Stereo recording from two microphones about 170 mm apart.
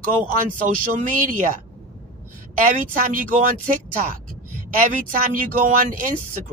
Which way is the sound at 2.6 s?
50° right (ahead or behind).